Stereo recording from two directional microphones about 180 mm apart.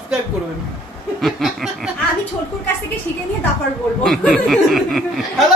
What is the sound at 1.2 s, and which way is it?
Speech, centre (ahead or behind).